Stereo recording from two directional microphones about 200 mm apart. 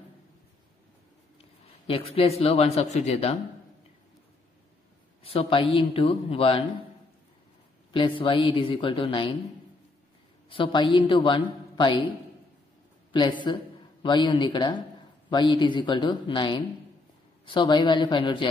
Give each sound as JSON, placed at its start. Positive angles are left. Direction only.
{"t": 1.4, "sound": "a man's voice", "side_deg": 30}
{"t": 5.2, "sound": "a man's voice", "side_deg": 30}
{"t": 7.9, "sound": "a man's voice", "side_deg": 25}
{"t": 10.5, "sound": "a man's voice", "side_deg": 25}
{"t": 13.1, "sound": "a man's voice", "side_deg": 25}